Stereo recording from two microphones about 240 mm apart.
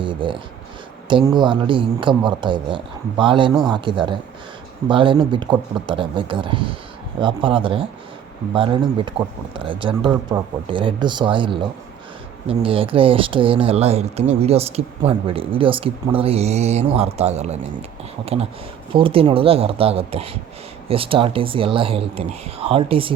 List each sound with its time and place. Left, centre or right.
0.0 s speech: centre
18.9 s speech: right